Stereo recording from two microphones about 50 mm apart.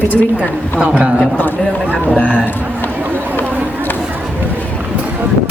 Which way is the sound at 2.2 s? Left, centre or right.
Left.